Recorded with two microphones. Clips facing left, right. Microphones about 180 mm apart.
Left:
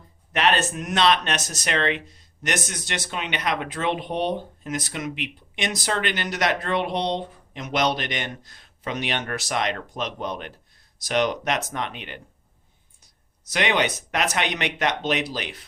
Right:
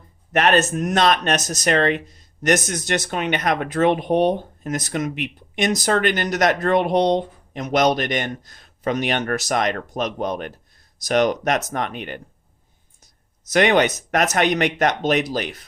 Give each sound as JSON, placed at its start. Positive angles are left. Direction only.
{"t": 0.3, "sound": "speech", "side_deg": -45}
{"t": 13.5, "sound": "speech", "side_deg": -45}